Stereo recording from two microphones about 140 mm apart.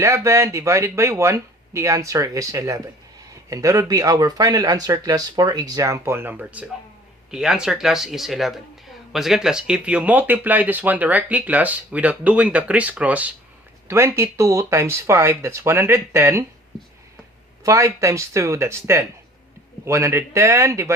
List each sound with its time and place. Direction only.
0.0 s speech: 20° right (ahead or behind)
17.6 s speech: 25° right (ahead or behind)